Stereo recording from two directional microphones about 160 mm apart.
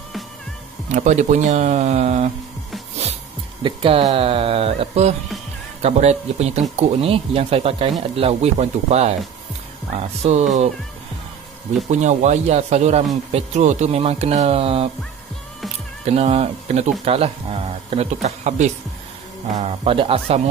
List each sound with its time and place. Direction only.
0.9 s speech: 50° right (ahead or behind)
3.6 s speech: 35° right (ahead or behind)
11.9 s speech: 45° right (ahead or behind)
16.1 s speech: 40° right (ahead or behind)